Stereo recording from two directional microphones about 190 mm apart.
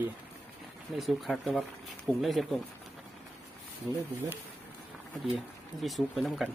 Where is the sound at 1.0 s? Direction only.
Centre (ahead or behind).